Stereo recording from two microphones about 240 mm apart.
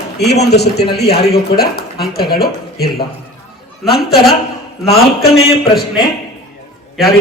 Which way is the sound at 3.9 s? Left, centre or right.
Left.